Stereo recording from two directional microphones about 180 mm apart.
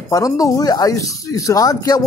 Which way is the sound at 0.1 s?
20° left (ahead or behind).